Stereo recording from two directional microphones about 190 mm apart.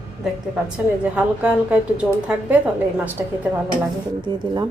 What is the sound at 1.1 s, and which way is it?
A woman's voice, 5° right (ahead or behind).